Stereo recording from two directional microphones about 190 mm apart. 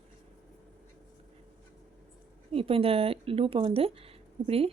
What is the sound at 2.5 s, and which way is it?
Speech, 30° right (ahead or behind).